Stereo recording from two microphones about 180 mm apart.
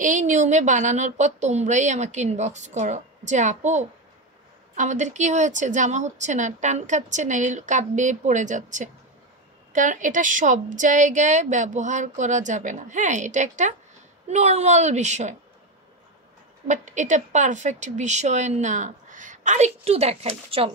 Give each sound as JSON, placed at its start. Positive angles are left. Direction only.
{"t": 0.0, "sound": "a woman's voice", "side_deg": -45}
{"t": 16.6, "sound": "a woman's voice", "side_deg": -40}